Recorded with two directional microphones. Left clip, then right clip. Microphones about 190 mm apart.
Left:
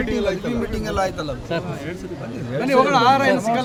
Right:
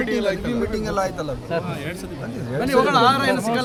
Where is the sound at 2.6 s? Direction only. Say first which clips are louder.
Left 1 dB; 25° right (ahead or behind).